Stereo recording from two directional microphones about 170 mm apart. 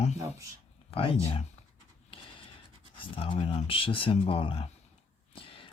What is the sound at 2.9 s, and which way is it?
Speech, 30° left (ahead or behind).